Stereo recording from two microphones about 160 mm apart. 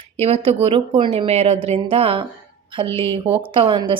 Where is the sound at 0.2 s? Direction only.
40° right (ahead or behind).